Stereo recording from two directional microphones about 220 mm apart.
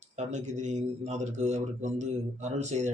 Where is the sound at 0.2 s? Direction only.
30° right (ahead or behind).